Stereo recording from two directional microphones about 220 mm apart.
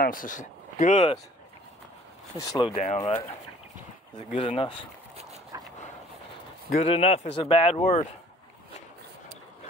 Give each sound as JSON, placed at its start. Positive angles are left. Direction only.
{"t": 0.0, "sound": "speech", "side_deg": 40}
{"t": 2.3, "sound": "speech", "side_deg": 15}
{"t": 2.7, "sound": "speech", "side_deg": 30}
{"t": 5.5, "sound": "dog", "side_deg": -15}
{"t": 6.8, "sound": "speech", "side_deg": 25}